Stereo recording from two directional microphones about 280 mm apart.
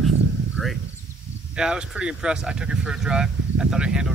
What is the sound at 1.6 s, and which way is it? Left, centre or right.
Speech, centre.